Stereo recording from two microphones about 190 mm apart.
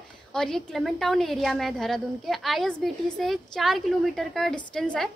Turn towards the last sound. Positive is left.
turn(degrees=5)  # may be behind; listen again after turning